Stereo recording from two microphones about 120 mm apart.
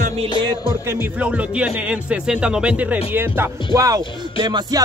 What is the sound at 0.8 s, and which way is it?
Speech, 15° right (ahead or behind).